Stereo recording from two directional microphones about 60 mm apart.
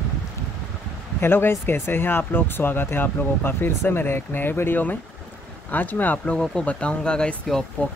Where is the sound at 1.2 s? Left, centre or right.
Left.